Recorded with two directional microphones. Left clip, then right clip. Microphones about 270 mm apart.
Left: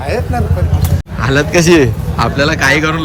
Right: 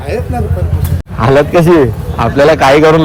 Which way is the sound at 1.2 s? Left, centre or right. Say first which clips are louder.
Right 4 dB; centre.